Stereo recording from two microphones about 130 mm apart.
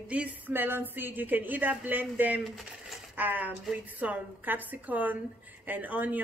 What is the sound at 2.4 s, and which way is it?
Speech, centre (ahead or behind).